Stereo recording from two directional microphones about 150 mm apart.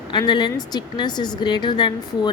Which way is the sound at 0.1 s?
30° left (ahead or behind).